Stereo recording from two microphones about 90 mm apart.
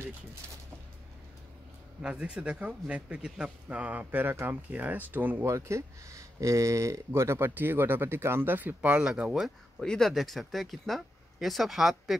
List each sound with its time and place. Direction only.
2.0 s a man's voice: 10° right (ahead or behind)
5.5 s speech: 30° right (ahead or behind); by 9.5 s 10° right (ahead or behind)
9.8 s speech: 5° left (ahead or behind)